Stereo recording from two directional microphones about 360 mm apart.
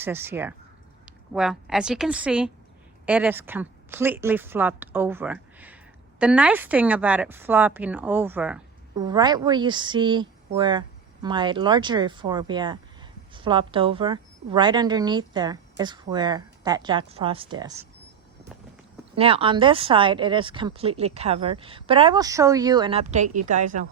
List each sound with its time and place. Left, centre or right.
0.0 s a woman's voice: centre
19.1 s speech: centre